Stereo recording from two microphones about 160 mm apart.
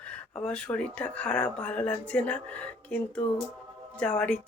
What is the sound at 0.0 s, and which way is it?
Speech, 5° left (ahead or behind).